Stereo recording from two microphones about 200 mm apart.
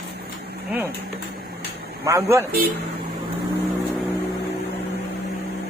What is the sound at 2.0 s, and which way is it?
Speech, 15° right (ahead or behind).